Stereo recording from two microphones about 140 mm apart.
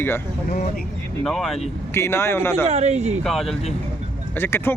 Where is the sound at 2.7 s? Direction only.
50° right (ahead or behind).